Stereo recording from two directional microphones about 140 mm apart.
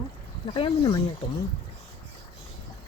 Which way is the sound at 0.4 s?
40° left (ahead or behind).